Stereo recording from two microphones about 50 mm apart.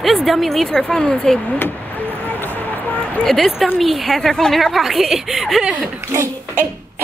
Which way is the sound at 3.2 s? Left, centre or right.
Centre.